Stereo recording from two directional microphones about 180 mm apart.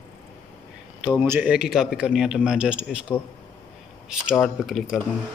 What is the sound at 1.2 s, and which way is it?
Speech, 5° right (ahead or behind).